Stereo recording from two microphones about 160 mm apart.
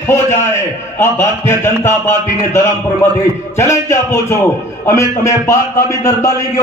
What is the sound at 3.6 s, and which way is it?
A man's voice, 15° left (ahead or behind).